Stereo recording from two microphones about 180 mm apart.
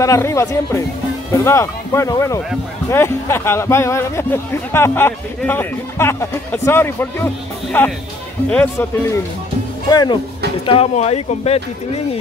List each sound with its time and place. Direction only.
0.0 s speech: 15° left (ahead or behind)
9.8 s speech: 20° left (ahead or behind)